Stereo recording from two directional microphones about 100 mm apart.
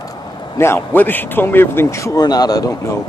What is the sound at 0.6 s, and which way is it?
A man's voice, 25° left (ahead or behind).